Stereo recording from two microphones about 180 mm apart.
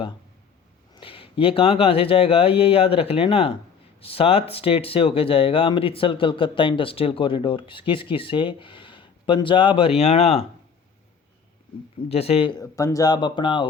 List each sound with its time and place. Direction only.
0.9 s speech: 30° left (ahead or behind)
12.0 s speech: 35° left (ahead or behind)